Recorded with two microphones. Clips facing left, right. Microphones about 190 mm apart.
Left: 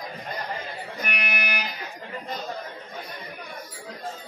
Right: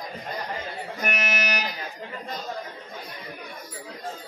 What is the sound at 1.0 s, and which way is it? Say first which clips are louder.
Music: right 4 dB; 45° right (ahead or behind).